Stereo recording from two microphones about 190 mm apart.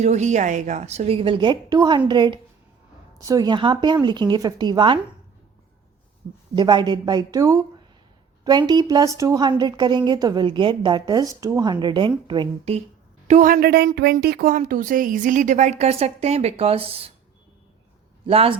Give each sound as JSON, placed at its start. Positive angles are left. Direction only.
{"t": 0.0, "sound": "a woman's voice", "side_deg": -35}
{"t": 6.6, "sound": "a woman's voice", "side_deg": -25}
{"t": 13.2, "sound": "speech", "side_deg": -40}
{"t": 18.3, "sound": "a woman's voice", "side_deg": -30}